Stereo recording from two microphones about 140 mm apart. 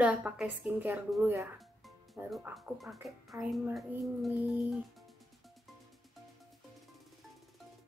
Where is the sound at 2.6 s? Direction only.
Centre (ahead or behind).